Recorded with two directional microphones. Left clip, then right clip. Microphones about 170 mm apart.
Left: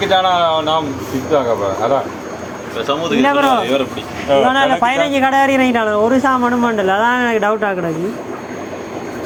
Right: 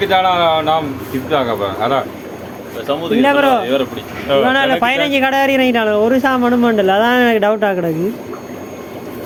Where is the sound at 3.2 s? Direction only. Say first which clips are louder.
Right 1 dB; 50° right (ahead or behind).